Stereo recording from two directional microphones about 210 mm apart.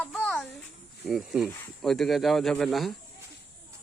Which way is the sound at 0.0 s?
5° left (ahead or behind).